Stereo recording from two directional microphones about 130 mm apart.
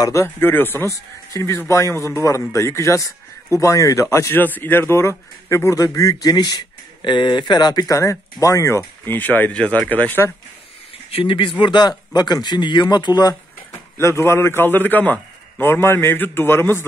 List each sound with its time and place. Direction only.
0.0 s speech: 25° left (ahead or behind)
11.1 s speech: 45° left (ahead or behind)
13.7 s a man's voice: 20° left (ahead or behind)